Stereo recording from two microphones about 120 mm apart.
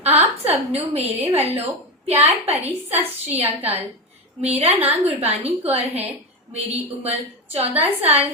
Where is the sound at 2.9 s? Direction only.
60° right (ahead or behind).